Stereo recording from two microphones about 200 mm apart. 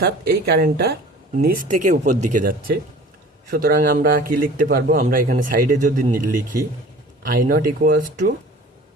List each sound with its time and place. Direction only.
0.0 s speech: 50° right (ahead or behind)